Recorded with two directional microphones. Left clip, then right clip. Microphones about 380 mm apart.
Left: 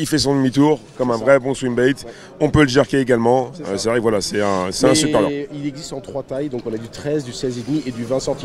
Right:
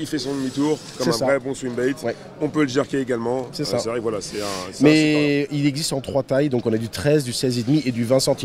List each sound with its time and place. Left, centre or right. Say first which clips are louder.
0.0 s speech: left 8 dB; left
5.0 s speech: left 1 dB; centre